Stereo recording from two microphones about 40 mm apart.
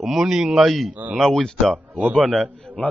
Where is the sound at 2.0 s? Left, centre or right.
Right.